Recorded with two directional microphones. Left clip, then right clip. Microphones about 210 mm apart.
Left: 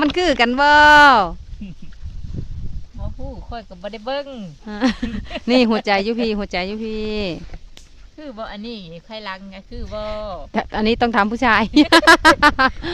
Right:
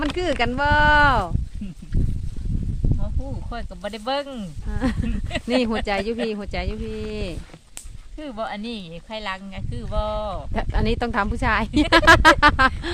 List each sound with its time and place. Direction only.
0.0 s speech: 25° left (ahead or behind)
3.5 s a woman's voice: centre (ahead or behind)
4.7 s speech: 25° left (ahead or behind)
8.2 s a woman's voice: centre (ahead or behind)
10.5 s speech: 25° left (ahead or behind)